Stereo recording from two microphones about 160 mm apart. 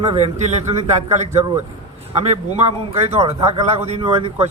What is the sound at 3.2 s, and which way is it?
A man's voice, 40° right (ahead or behind).